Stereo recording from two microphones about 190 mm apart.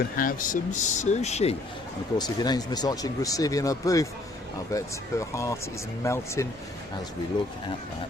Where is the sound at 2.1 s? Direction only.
20° left (ahead or behind).